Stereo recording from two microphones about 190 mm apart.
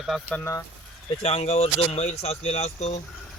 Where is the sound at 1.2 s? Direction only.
35° left (ahead or behind).